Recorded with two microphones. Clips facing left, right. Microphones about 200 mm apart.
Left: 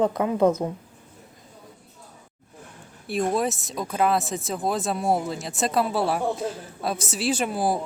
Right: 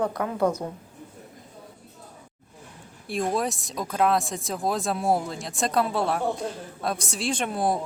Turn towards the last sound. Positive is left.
turn(degrees=5)  # may be behind; listen again after turning